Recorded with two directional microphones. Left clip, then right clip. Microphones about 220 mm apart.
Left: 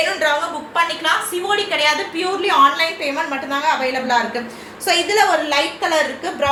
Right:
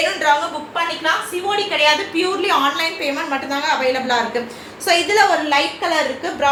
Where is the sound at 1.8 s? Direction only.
15° right (ahead or behind).